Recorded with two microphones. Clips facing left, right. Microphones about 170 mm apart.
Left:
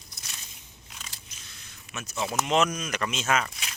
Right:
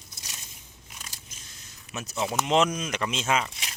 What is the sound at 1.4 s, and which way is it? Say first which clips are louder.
Zipper: even; 45° right (ahead or behind).